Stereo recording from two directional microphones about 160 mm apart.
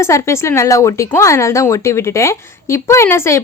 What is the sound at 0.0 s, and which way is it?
A woman's voice, 20° left (ahead or behind).